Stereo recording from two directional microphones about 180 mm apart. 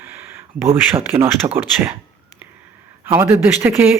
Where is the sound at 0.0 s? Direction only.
15° right (ahead or behind).